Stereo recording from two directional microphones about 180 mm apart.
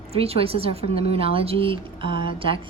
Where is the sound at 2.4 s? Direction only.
30° right (ahead or behind).